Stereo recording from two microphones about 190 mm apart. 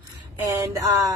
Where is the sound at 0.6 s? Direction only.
15° right (ahead or behind).